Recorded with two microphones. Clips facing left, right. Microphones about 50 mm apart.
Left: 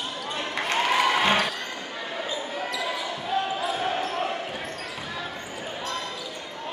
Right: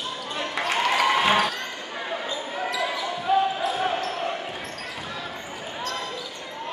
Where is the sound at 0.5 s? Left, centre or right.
Centre.